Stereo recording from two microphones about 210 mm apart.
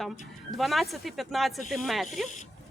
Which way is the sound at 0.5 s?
Centre (ahead or behind).